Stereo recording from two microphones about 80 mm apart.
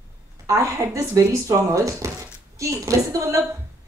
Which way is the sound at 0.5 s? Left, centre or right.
Right.